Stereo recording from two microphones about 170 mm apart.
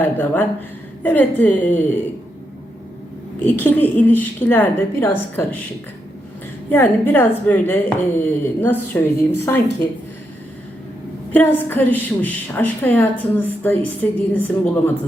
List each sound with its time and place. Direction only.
0.0 s a woman's voice: 10° left (ahead or behind)
3.4 s a woman's voice: 10° left (ahead or behind)
6.7 s a woman's voice: 10° left (ahead or behind)
11.3 s a woman's voice: 10° left (ahead or behind)